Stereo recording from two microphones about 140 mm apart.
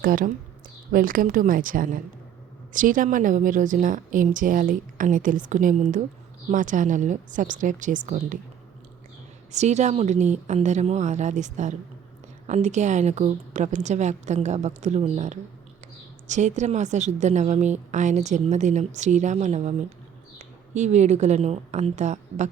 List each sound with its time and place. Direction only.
0.0 s a woman's voice: 90° right; by 8.4 s 65° right (ahead or behind)
9.5 s a woman's voice: 55° right (ahead or behind)
20.7 s a woman's voice: 55° right (ahead or behind)